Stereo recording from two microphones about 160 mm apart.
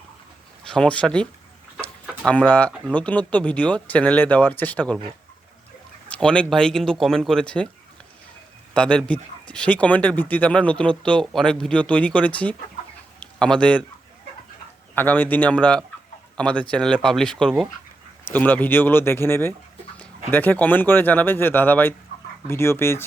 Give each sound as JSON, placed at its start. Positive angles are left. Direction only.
{"t": 0.7, "sound": "speech", "side_deg": 5}
{"t": 1.8, "sound": "a sound", "side_deg": 10}
{"t": 2.8, "sound": "speech", "side_deg": 10}
{"t": 6.1, "sound": "speech", "side_deg": 5}
{"t": 8.7, "sound": "speech", "side_deg": 5}
{"t": 14.9, "sound": "speech", "side_deg": 10}